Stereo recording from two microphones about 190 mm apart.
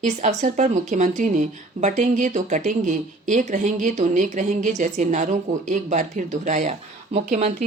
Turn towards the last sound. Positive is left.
turn(degrees=-35)  # may be behind; listen again after turning